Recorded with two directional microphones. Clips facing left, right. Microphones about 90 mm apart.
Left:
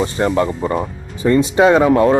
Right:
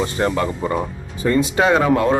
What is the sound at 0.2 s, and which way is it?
Speech, 20° left (ahead or behind).